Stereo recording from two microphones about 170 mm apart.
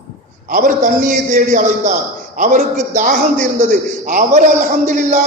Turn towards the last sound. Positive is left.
turn(degrees=-50)  # may be behind; listen again after turning